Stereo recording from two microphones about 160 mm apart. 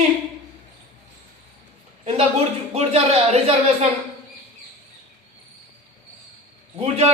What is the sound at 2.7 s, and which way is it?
Speech, 40° right (ahead or behind).